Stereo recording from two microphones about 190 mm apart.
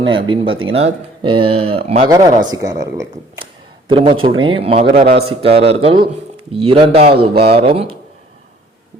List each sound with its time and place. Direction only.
0.0 s speech: 25° right (ahead or behind)
2.0 s speech: 20° right (ahead or behind)
3.8 s speech: 25° right (ahead or behind)